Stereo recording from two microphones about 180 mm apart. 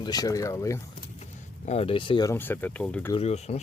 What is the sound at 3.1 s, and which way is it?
Speech, 35° left (ahead or behind).